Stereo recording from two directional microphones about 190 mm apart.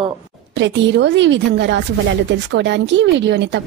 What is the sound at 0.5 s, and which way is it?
A woman's voice, 70° right (ahead or behind).